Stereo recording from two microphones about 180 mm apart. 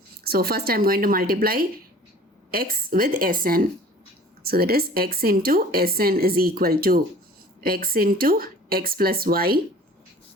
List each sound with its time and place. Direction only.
0.3 s a woman's voice: 60° right (ahead or behind)